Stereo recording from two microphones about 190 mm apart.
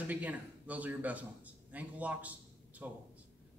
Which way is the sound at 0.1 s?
10° right (ahead or behind).